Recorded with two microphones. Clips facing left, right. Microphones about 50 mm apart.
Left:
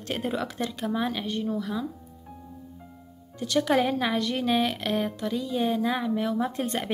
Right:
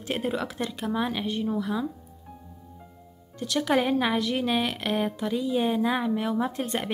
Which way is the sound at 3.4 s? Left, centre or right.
Centre.